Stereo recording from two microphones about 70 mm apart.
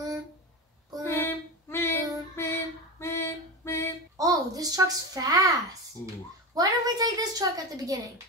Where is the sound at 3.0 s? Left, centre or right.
Left.